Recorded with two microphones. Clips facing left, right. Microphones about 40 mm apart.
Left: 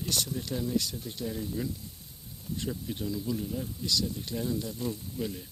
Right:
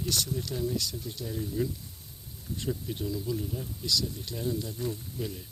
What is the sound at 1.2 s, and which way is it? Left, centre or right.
Speech, centre.